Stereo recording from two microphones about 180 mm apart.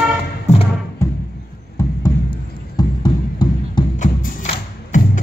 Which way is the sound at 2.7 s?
25° left (ahead or behind).